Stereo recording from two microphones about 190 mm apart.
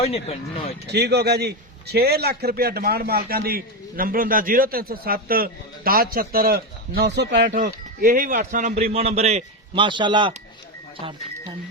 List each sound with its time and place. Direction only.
0.0 s speech: 30° left (ahead or behind)
0.9 s a man's voice: 60° right (ahead or behind)
7.6 s a man's voice: 50° right (ahead or behind)
8.9 s a man's voice: 35° right (ahead or behind)